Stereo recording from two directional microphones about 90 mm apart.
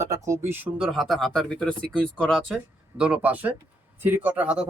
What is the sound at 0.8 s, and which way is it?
Speech, centre (ahead or behind).